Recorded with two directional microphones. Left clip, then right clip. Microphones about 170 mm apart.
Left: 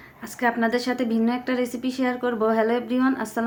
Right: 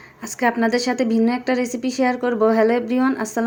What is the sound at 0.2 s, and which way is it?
A woman's voice, 25° right (ahead or behind).